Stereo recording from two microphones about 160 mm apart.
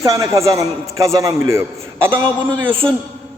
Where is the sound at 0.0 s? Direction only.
20° right (ahead or behind).